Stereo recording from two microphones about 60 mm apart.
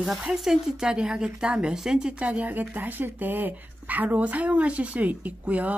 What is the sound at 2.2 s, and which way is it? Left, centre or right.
Speech, right.